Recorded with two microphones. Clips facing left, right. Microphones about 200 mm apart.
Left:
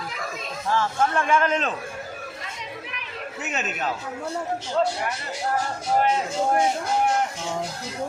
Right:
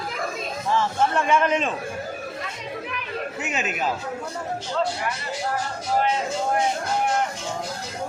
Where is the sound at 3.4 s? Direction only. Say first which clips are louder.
Even; 10° right (ahead or behind).